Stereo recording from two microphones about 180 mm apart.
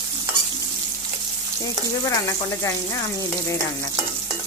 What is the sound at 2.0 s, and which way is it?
Speech, 20° left (ahead or behind).